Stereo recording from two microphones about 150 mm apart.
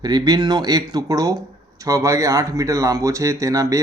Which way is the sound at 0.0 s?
25° right (ahead or behind).